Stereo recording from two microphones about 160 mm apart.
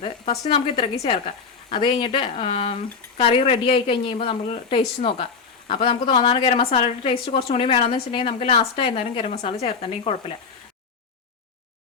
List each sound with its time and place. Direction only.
0.0 s a woman's voice: 30° left (ahead or behind)